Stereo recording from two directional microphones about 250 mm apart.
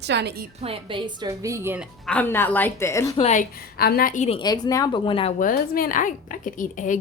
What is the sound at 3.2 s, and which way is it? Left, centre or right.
A woman's voice, left.